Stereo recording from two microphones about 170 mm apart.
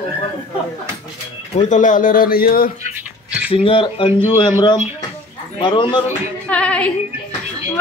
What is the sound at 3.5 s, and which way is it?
Speech, 30° left (ahead or behind).